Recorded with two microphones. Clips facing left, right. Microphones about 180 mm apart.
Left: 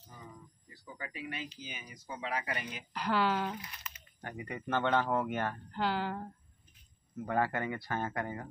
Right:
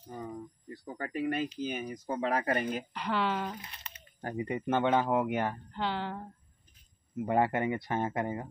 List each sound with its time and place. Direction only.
0.1 s speech: 55° right (ahead or behind)
2.9 s speech: centre (ahead or behind)
3.6 s a sound: 30° right (ahead or behind)
4.5 s a man's voice: 20° right (ahead or behind)
5.7 s speech: 5° left (ahead or behind)
7.2 s a man's voice: 25° right (ahead or behind)